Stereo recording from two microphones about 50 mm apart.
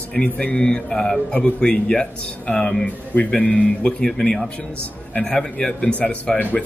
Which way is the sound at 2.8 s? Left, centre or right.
Left.